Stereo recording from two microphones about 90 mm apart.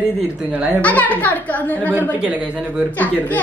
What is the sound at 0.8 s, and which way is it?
Speech, 15° left (ahead or behind).